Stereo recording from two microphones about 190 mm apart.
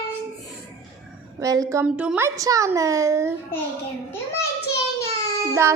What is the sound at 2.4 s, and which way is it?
Speech, 20° right (ahead or behind).